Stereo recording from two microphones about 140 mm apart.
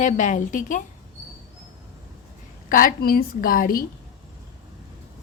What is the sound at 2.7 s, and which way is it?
A woman's voice, 80° left.